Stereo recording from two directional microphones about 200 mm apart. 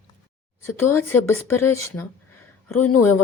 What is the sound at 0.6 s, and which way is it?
Speech, 10° left (ahead or behind).